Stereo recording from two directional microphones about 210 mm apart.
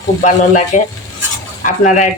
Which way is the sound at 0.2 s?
35° left (ahead or behind).